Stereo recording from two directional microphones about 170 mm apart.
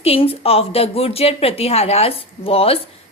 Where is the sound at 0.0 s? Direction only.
35° left (ahead or behind).